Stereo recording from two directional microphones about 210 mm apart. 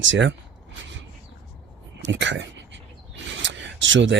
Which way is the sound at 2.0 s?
55° right (ahead or behind).